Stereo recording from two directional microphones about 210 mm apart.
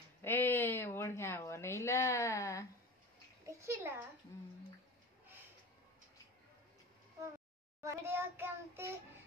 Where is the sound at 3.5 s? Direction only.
15° right (ahead or behind).